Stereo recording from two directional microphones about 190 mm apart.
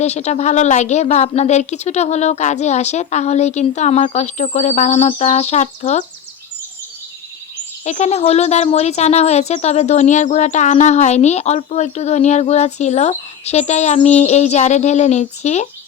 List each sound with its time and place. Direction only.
0.0 s speech: 35° left (ahead or behind)
7.9 s speech: 35° left (ahead or behind)